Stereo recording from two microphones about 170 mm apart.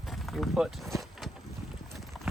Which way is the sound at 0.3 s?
Centre (ahead or behind).